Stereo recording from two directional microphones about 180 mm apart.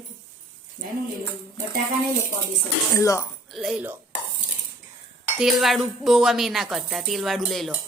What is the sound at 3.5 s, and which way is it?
Speech, centre (ahead or behind).